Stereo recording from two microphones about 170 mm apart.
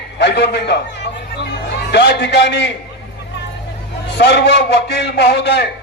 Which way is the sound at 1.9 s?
85° left.